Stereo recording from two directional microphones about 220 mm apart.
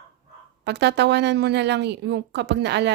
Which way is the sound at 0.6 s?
50° right (ahead or behind).